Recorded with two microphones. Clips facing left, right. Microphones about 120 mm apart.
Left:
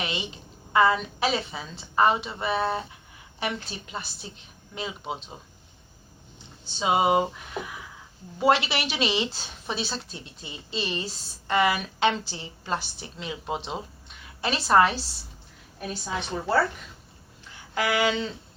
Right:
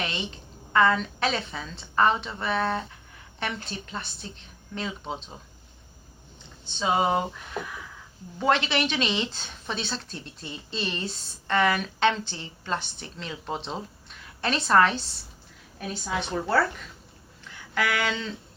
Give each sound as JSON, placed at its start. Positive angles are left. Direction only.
{"t": 0.0, "sound": "a sound", "side_deg": 5}
{"t": 0.7, "sound": "a woman's voice", "side_deg": 5}
{"t": 6.7, "sound": "a woman's voice", "side_deg": 15}
{"t": 8.4, "sound": "a woman's voice", "side_deg": 10}
{"t": 17.7, "sound": "a woman's voice", "side_deg": 20}